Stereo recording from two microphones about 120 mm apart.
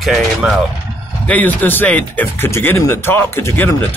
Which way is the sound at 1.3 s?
15° left (ahead or behind).